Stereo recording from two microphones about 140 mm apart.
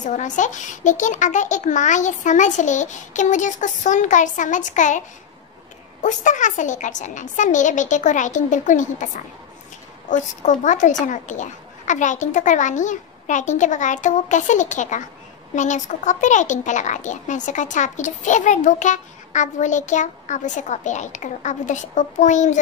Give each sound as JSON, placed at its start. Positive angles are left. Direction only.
{"t": 0.0, "sound": "a child's voice", "side_deg": 60}
{"t": 6.0, "sound": "a child's voice", "side_deg": 60}